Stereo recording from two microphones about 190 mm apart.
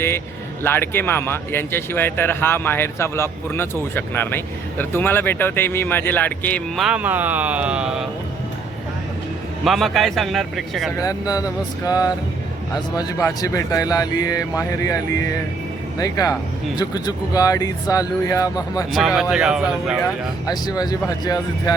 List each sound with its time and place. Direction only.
0.6 s speech: 10° left (ahead or behind)
6.8 s speech: 5° right (ahead or behind)
9.6 s a man's voice: centre (ahead or behind)
11.0 s speech: 20° left (ahead or behind)
18.9 s a man's voice: centre (ahead or behind)
20.5 s speech: 20° left (ahead or behind)